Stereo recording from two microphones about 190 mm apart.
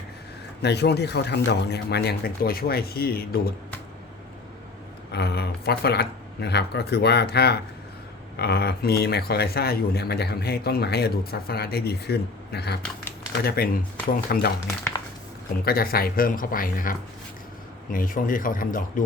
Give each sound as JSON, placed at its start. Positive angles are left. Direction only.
{"t": 0.6, "sound": "speech", "side_deg": 60}
{"t": 5.1, "sound": "speech", "side_deg": 55}
{"t": 15.6, "sound": "speech", "side_deg": 50}